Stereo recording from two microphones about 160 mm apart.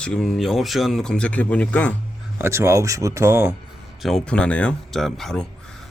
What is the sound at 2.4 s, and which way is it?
Speech, 15° right (ahead or behind).